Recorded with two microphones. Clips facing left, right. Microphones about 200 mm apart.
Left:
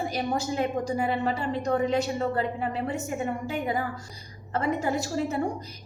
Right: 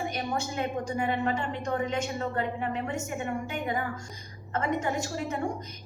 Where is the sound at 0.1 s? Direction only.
35° left (ahead or behind).